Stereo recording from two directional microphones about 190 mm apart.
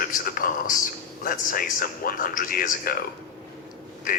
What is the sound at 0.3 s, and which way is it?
Speech, 45° left (ahead or behind).